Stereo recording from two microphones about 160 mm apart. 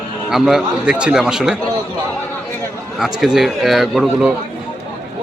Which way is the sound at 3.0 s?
5° right (ahead or behind).